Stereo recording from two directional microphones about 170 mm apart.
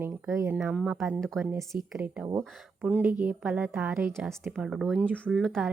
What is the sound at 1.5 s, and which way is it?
A woman's voice, 15° right (ahead or behind).